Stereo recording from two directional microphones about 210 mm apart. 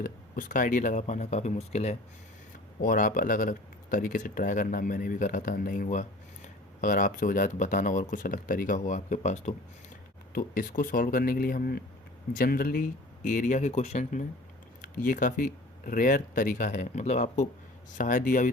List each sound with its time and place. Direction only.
0.0 s speech: 40° left (ahead or behind)